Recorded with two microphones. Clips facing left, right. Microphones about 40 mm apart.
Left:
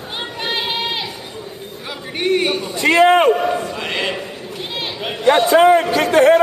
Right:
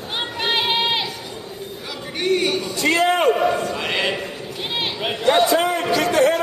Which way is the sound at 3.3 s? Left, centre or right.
Centre.